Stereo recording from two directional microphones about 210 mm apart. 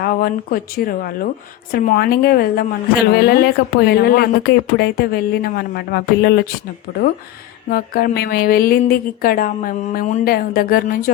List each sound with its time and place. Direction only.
0.0 s speech: 45° left (ahead or behind)